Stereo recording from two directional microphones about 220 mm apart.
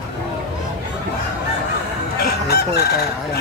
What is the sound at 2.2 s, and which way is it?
Fowl, 45° left (ahead or behind).